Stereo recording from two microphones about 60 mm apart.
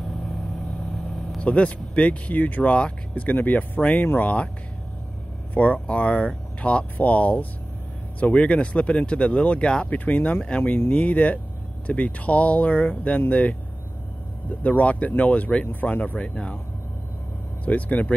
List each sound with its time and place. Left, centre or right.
1.4 s speech: left
5.5 s speech: left
14.6 s speech: left
17.6 s speech: left